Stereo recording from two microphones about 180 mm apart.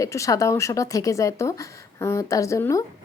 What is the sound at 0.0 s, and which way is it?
Speech, 15° left (ahead or behind).